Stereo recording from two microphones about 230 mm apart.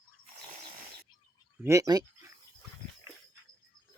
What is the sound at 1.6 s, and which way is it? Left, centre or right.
Speech, centre.